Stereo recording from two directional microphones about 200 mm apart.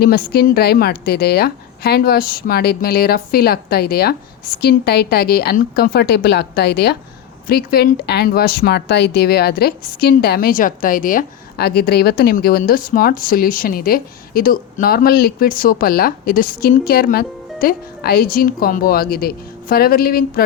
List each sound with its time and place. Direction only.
0.0 s speech: 50° left (ahead or behind)